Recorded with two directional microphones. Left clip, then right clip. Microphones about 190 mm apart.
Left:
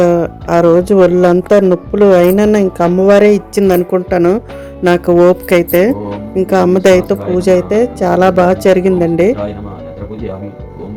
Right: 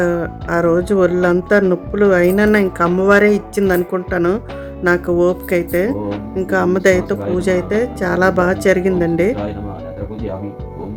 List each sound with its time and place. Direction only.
0.0 s a woman's voice: 25° left (ahead or behind)
1.2 s speech: 5° left (ahead or behind)
1.9 s a woman's voice: 20° left (ahead or behind)